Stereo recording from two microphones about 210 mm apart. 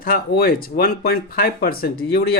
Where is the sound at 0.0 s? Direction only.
45° left (ahead or behind).